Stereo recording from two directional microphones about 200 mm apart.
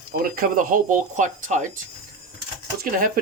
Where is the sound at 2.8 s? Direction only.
45° right (ahead or behind).